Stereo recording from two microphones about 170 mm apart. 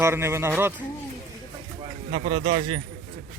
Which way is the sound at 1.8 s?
35° right (ahead or behind).